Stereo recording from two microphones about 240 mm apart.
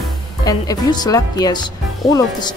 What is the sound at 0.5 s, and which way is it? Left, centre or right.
Speech, centre.